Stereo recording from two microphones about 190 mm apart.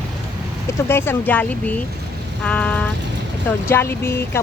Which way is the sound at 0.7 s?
10° left (ahead or behind).